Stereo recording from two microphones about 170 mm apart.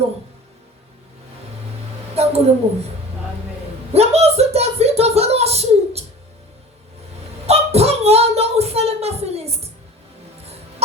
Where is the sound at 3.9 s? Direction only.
35° right (ahead or behind).